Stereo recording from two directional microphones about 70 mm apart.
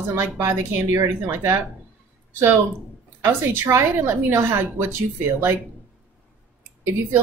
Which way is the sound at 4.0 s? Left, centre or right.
Right.